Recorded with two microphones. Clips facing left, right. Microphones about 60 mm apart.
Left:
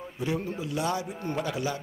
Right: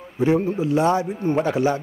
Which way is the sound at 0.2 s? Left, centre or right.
Right.